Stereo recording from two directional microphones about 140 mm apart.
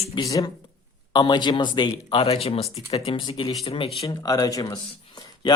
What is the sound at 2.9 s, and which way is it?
Speech, 35° left (ahead or behind).